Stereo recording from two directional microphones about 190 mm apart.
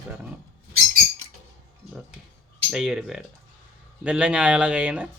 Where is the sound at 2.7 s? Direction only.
5° right (ahead or behind).